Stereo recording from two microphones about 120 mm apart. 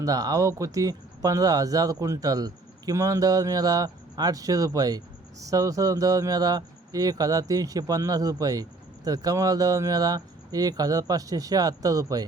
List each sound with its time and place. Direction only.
0.0 s speech: 30° right (ahead or behind)